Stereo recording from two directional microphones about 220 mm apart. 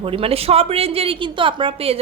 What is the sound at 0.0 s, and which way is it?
A woman's voice, 25° right (ahead or behind).